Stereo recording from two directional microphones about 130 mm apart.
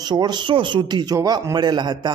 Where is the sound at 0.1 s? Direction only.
35° right (ahead or behind).